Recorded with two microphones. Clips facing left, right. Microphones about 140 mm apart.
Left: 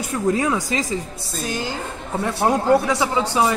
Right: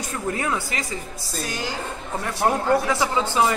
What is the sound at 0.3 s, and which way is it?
Speech, 15° left (ahead or behind).